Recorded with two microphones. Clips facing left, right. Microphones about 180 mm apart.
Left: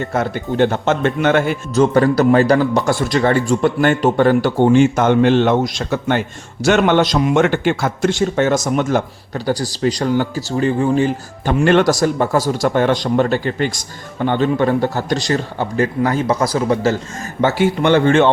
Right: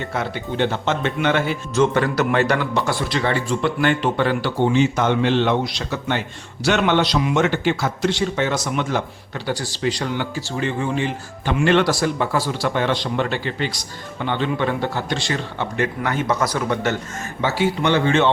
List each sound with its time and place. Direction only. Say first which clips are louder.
0.0 s a man's voice: left 5 dB; 45° left (ahead or behind)
1.8 s a man's voice: left 6 dB; 35° left (ahead or behind)
17.4 s a man's voice: left 5 dB; 50° left (ahead or behind)